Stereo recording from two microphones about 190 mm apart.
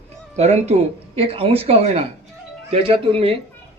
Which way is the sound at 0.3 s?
35° right (ahead or behind).